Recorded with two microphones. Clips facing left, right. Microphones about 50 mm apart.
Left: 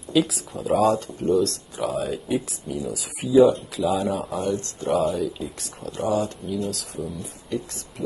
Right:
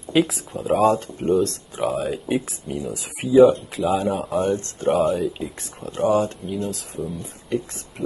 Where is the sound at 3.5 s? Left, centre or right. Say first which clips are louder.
Right 2 dB; right.